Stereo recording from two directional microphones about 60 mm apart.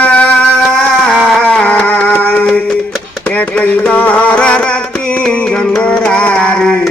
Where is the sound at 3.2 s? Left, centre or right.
Left.